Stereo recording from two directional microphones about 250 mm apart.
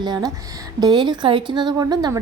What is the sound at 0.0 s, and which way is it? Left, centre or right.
Speech, centre.